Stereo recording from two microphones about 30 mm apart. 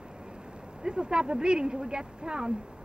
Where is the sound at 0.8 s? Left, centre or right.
Right.